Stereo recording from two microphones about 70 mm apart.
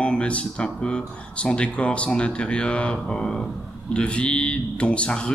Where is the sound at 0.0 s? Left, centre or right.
Centre.